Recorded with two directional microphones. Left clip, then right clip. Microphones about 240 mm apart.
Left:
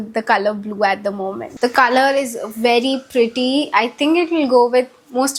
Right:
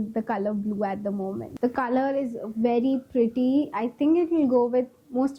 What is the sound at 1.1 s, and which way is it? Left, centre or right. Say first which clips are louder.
Speech: left 8 dB; left.